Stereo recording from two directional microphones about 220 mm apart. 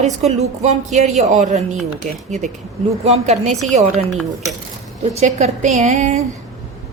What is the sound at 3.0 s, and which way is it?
A woman's voice, 30° right (ahead or behind).